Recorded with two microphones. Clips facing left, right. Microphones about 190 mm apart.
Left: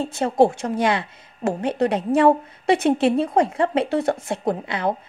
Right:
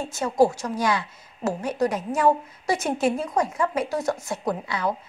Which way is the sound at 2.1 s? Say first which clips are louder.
Left 6 dB; 60° left (ahead or behind).